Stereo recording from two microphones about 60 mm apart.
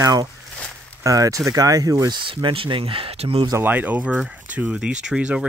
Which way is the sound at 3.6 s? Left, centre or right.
Right.